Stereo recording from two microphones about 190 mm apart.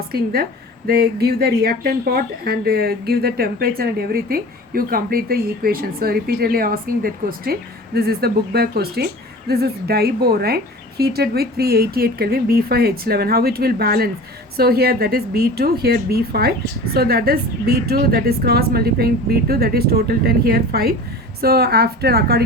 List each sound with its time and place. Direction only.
0.1 s a woman's voice: 55° right (ahead or behind)